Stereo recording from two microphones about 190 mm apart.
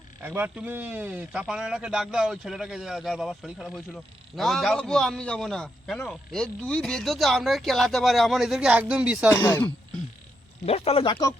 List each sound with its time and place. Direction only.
0.2 s a man's voice: 10° right (ahead or behind)
9.3 s speech: 10° left (ahead or behind)
10.7 s speech: 30° left (ahead or behind)